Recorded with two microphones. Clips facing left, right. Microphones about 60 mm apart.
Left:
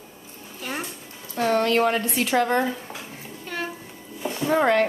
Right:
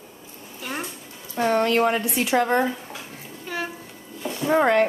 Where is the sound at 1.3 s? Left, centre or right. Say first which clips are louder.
Right 1 dB; centre.